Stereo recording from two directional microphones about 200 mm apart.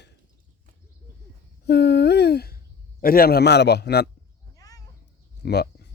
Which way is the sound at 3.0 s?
50° left (ahead or behind).